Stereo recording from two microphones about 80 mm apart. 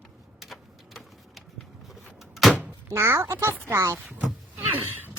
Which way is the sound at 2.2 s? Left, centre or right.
Centre.